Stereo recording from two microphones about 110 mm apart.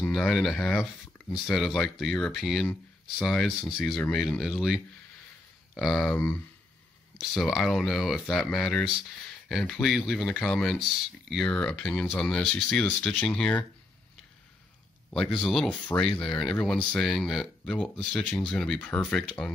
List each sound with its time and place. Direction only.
0.1 s speech: 5° left (ahead or behind)
6.1 s speech: 20° left (ahead or behind)
7.2 s speech: centre (ahead or behind)
15.3 s speech: 5° left (ahead or behind)